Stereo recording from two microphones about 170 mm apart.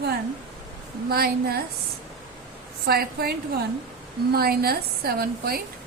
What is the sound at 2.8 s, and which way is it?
Speech, 65° right (ahead or behind).